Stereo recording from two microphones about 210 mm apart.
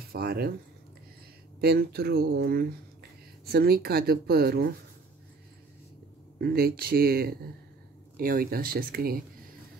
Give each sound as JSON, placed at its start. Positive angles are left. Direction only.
{"t": 0.0, "sound": "speech", "side_deg": -45}
{"t": 1.6, "sound": "speech", "side_deg": -50}
{"t": 6.3, "sound": "speech", "side_deg": -45}